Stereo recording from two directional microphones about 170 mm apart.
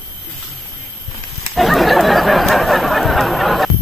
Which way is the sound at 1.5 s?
Centre (ahead or behind).